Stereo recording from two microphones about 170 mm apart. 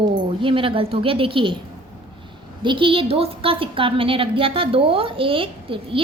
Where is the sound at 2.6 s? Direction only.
30° right (ahead or behind).